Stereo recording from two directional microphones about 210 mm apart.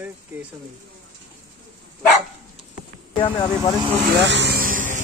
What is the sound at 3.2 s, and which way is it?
Speech, 15° left (ahead or behind).